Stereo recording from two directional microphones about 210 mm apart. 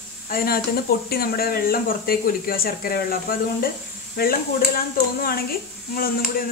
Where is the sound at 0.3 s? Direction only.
45° left (ahead or behind).